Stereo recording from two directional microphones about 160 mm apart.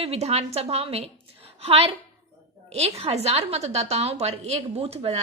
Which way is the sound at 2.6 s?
40° right (ahead or behind).